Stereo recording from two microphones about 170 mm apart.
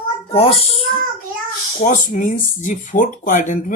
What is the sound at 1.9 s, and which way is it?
Speech, 45° left (ahead or behind).